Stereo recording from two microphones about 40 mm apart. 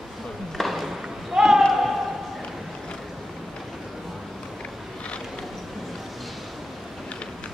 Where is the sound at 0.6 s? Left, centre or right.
Centre.